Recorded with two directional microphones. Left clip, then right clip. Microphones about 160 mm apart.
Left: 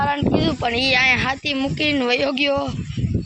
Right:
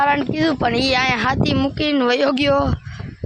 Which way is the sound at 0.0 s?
35° right (ahead or behind).